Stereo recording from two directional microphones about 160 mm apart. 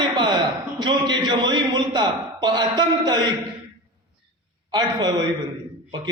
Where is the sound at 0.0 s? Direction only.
30° right (ahead or behind).